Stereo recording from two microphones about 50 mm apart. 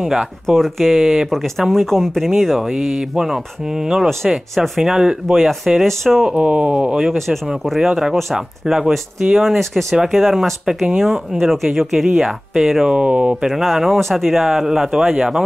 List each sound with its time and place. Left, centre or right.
0.0 s speech: centre
0.5 s speech: centre
1.7 s speech: centre
2.7 s speech: centre
6.2 s speech: right
7.1 s speech: centre
12.9 s speech: right
13.5 s speech: centre